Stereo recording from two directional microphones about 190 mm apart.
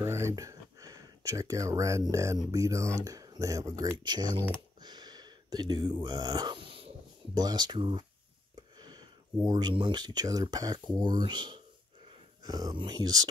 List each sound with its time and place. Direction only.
0.0 s speech: 15° right (ahead or behind)
4.8 s a sound: 20° right (ahead or behind)
7.3 s speech: 20° right (ahead or behind)